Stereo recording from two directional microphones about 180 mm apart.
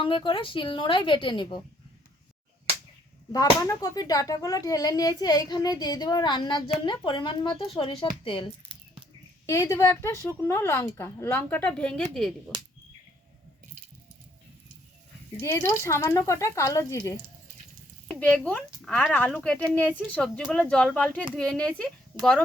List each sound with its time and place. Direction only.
0.0 s speech: 30° left (ahead or behind)
3.3 s speech: 20° left (ahead or behind)
9.5 s a woman's voice: 20° left (ahead or behind)
15.4 s a woman's voice: 15° left (ahead or behind)
18.1 s a woman's voice: 5° left (ahead or behind)